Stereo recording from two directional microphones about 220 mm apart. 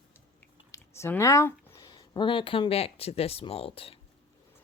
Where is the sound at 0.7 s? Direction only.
10° left (ahead or behind).